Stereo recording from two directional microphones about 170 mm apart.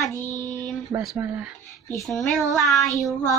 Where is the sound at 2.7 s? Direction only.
20° left (ahead or behind).